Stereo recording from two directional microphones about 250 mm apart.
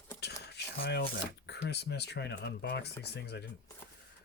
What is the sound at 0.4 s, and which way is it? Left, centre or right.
Speech, left.